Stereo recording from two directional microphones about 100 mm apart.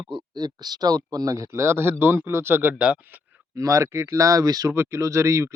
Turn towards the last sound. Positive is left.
turn(degrees=-30)  # may be behind; listen again after turning